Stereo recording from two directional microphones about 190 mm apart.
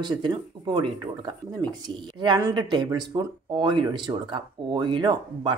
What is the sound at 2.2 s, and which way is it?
Speech, 20° right (ahead or behind).